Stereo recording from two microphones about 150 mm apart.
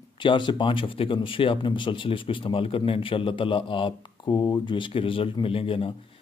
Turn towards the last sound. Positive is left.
turn(degrees=35)  # may be behind; listen again after turning